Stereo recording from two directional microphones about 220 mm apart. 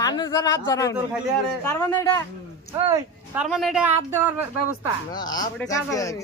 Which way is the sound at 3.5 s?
Centre (ahead or behind).